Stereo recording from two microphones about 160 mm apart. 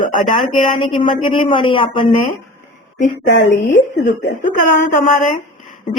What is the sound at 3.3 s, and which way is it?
Speech, 90° left.